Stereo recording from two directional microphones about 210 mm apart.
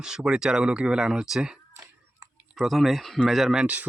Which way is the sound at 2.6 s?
Centre (ahead or behind).